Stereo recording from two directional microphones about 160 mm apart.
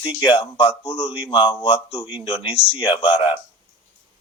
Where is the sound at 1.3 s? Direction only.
30° left (ahead or behind).